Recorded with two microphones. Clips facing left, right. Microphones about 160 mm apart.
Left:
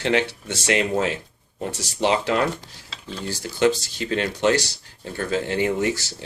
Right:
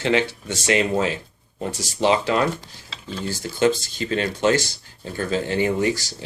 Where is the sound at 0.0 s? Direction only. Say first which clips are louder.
Right 1 dB; 65° left (ahead or behind).